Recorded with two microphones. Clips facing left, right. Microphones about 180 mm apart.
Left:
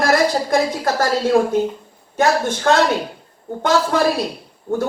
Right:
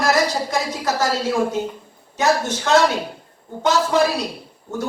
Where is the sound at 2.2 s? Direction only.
55° left (ahead or behind).